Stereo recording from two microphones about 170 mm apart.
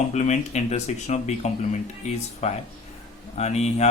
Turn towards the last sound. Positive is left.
turn(degrees=40)  # may be behind; listen again after turning